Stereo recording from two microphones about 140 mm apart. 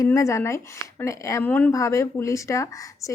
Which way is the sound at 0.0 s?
20° left (ahead or behind).